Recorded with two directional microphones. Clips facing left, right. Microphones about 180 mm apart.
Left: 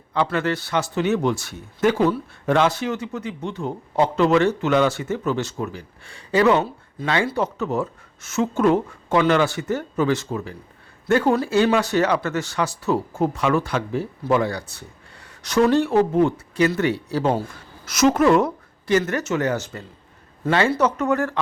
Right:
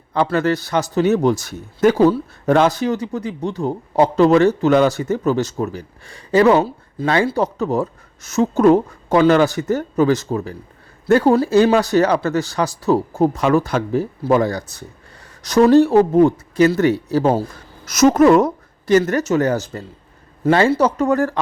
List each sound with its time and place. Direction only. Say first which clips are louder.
0.1 s speech: right 5 dB; 40° right (ahead or behind)